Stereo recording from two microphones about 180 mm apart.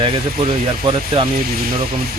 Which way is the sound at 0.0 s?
30° right (ahead or behind).